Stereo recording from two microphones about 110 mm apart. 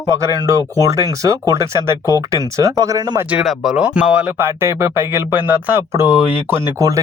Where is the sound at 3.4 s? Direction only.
5° right (ahead or behind).